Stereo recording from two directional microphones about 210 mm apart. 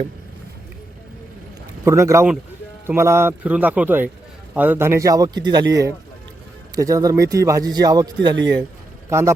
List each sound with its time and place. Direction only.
1.8 s a man's voice: 15° right (ahead or behind)